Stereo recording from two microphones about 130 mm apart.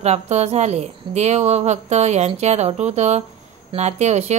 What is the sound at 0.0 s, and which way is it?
Speech, 55° right (ahead or behind).